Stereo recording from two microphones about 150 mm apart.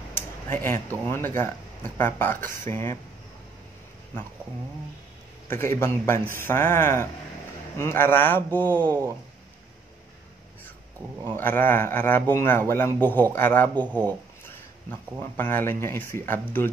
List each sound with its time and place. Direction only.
0.5 s a man's voice: 15° left (ahead or behind)
5.5 s a man's voice: 15° left (ahead or behind)
11.3 s a man's voice: 15° left (ahead or behind)